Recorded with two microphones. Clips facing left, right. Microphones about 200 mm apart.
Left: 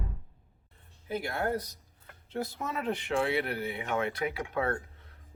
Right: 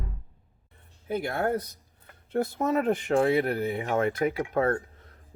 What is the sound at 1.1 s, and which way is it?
Speech, 50° right (ahead or behind).